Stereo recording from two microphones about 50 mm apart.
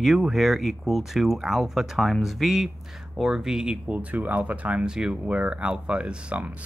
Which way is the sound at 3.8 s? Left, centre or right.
Right.